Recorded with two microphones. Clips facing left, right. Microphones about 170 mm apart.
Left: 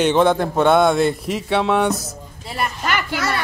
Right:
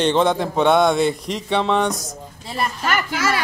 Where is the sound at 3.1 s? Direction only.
90° right.